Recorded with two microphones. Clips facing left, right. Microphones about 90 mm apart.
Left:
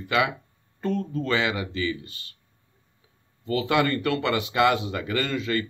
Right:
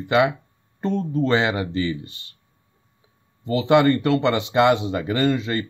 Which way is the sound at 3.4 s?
25° right (ahead or behind).